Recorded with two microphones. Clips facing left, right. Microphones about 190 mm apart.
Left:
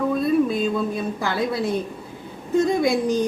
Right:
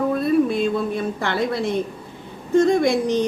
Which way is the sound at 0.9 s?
Centre (ahead or behind).